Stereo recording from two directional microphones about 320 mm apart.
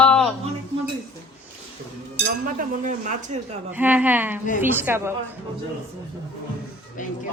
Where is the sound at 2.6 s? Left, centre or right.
Right.